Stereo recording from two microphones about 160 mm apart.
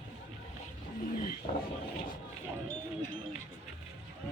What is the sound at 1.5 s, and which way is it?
Speech, 50° left (ahead or behind).